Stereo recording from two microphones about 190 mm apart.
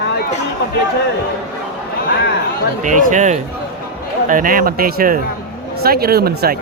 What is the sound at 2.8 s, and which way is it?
Speech, 40° right (ahead or behind).